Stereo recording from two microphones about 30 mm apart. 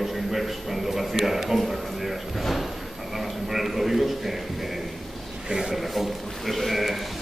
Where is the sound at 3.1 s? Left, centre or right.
Centre.